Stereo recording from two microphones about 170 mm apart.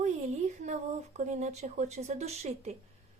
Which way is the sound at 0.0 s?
40° right (ahead or behind).